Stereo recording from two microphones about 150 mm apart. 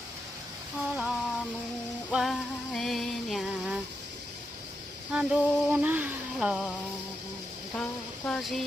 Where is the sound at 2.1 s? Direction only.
Centre (ahead or behind).